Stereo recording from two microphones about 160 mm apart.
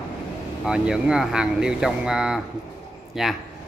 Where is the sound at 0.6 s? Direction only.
5° right (ahead or behind).